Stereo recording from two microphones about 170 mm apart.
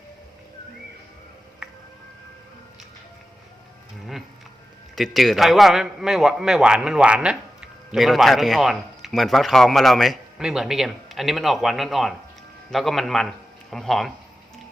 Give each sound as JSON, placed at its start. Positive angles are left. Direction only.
{"t": 4.9, "sound": "a man's voice", "side_deg": 0}